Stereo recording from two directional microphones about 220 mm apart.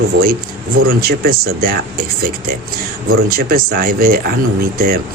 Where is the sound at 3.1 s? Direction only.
40° right (ahead or behind).